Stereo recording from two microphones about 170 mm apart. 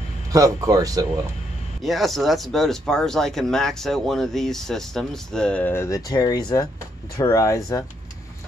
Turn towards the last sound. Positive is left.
turn(degrees=20)  # may be behind; listen again after turning